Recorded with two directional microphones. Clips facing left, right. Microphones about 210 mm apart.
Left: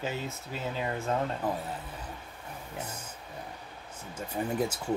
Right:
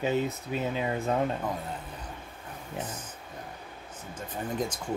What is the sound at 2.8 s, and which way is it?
Speech, 10° left (ahead or behind).